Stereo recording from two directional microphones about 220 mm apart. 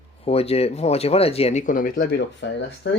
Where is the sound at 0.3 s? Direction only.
25° left (ahead or behind); by 2.9 s 55° left (ahead or behind).